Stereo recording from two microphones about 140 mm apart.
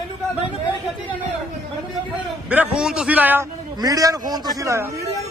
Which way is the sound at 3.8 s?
25° right (ahead or behind).